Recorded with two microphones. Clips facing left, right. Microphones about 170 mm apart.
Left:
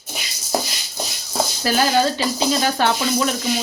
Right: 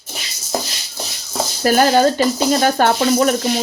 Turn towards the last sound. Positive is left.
turn(degrees=-45)  # may be behind; listen again after turning